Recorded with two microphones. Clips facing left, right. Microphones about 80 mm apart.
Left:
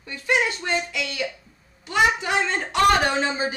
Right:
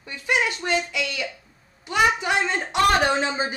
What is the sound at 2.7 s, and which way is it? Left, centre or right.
Speech, right.